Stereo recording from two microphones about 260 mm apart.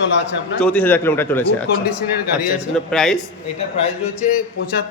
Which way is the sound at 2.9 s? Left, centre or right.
Centre.